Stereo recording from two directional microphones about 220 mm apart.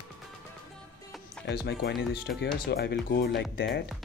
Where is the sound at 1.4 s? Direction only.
50° left (ahead or behind).